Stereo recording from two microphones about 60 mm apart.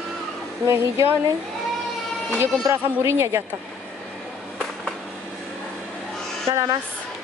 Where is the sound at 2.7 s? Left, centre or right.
Right.